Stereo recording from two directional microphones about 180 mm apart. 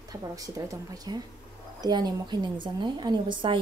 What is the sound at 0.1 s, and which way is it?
A woman's voice, 20° right (ahead or behind).